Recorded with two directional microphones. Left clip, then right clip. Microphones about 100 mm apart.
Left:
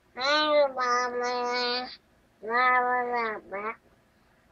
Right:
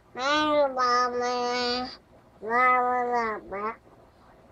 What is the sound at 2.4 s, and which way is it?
Cat, 10° right (ahead or behind).